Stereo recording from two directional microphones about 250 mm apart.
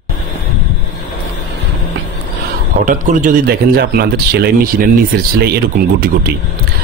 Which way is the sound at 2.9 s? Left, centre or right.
Right.